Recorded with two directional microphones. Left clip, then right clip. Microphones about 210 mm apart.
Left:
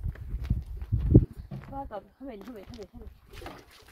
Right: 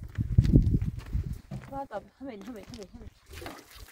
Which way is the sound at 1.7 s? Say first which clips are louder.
Right 1 dB; 45° right (ahead or behind).